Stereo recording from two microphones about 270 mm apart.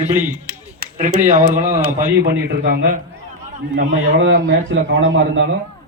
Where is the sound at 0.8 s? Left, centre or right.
Right.